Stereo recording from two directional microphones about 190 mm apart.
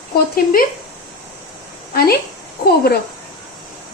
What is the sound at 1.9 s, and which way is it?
Speech, 55° left (ahead or behind).